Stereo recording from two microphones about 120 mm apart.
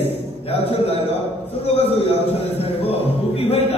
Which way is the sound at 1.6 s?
55° left (ahead or behind).